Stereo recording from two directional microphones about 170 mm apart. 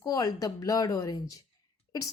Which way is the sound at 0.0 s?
20° left (ahead or behind).